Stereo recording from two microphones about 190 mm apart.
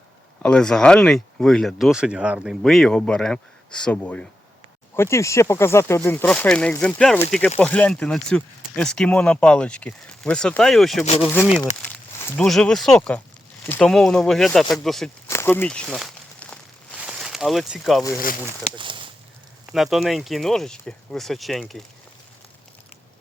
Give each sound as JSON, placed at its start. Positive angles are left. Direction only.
{"t": 0.4, "sound": "speech", "side_deg": 5}
{"t": 11.0, "sound": "speech", "side_deg": 35}
{"t": 11.9, "sound": "speech", "side_deg": 5}
{"t": 15.3, "sound": "a sound", "side_deg": 10}
{"t": 18.8, "sound": "a sound", "side_deg": -25}
{"t": 19.7, "sound": "speech", "side_deg": 0}